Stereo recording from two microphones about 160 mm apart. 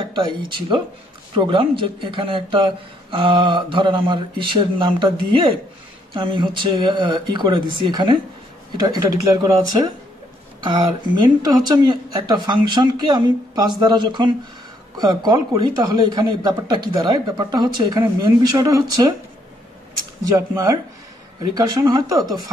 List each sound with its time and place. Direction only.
0.0 s a man's voice: 30° right (ahead or behind)
20.2 s speech: 20° right (ahead or behind)